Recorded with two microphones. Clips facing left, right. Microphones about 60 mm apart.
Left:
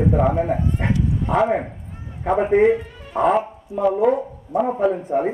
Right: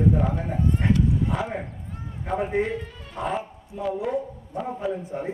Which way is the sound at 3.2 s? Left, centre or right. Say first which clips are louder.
Left 11 dB; left.